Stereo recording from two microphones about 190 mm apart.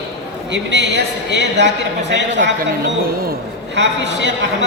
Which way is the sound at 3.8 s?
65° right (ahead or behind).